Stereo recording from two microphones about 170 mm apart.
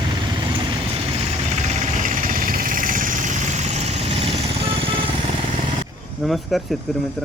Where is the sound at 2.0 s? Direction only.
50° right (ahead or behind).